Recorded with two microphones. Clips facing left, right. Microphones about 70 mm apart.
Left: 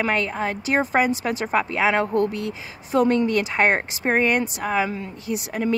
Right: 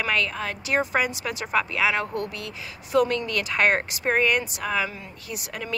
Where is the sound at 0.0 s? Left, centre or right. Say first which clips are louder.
Left 3 dB; left.